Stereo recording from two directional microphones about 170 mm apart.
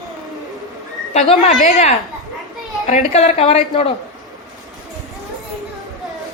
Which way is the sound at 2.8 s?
45° left (ahead or behind).